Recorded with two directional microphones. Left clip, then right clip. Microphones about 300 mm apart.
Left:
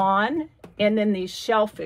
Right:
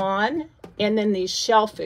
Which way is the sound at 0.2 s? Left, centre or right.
Centre.